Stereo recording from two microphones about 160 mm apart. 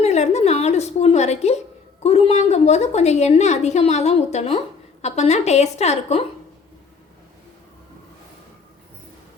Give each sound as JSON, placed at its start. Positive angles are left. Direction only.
{"t": 0.0, "sound": "a woman's voice", "side_deg": 45}